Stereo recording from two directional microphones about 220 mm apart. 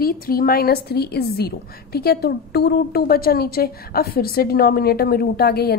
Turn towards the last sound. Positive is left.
turn(degrees=45)  # may be behind; listen again after turning